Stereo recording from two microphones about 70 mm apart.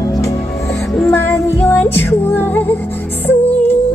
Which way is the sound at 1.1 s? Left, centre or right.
Left.